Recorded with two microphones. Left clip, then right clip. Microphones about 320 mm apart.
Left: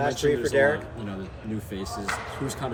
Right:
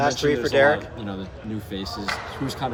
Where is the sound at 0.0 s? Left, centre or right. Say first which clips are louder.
Right 3 dB; centre.